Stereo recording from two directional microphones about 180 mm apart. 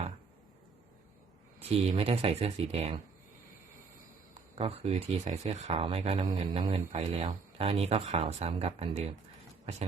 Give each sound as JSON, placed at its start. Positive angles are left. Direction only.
{"t": 1.6, "sound": "speech", "side_deg": -35}
{"t": 4.5, "sound": "speech", "side_deg": -30}